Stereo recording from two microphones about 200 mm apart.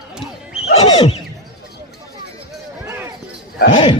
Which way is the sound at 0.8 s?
20° left (ahead or behind).